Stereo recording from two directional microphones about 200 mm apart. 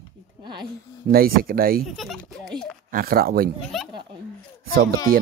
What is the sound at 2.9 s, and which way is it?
Speech, 50° right (ahead or behind).